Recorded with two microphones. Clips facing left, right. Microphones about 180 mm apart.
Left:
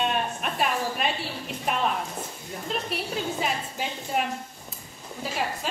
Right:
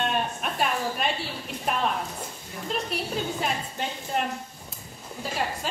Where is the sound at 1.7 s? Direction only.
Centre (ahead or behind).